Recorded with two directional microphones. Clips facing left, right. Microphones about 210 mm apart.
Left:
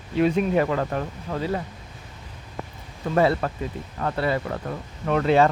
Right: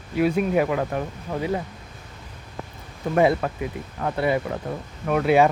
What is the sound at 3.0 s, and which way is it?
Speech, 15° right (ahead or behind).